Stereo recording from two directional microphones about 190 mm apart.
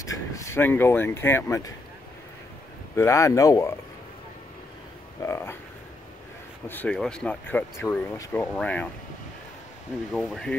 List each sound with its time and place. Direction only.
0.0 s speech: 15° left (ahead or behind)
3.0 s speech: 15° left (ahead or behind)
5.2 s speech: 15° left (ahead or behind)
6.7 s speech: 5° left (ahead or behind)
10.1 s speech: centre (ahead or behind)